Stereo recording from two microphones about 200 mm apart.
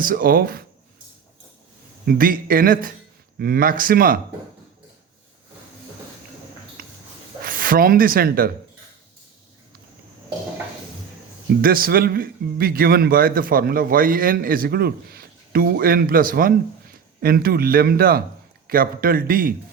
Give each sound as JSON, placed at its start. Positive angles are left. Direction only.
{"t": 0.0, "sound": "a man's voice", "side_deg": -45}
{"t": 2.0, "sound": "a man's voice", "side_deg": -45}
{"t": 6.8, "sound": "a sound", "side_deg": -45}
{"t": 7.4, "sound": "speech", "side_deg": -45}
{"t": 11.6, "sound": "a man's voice", "side_deg": -45}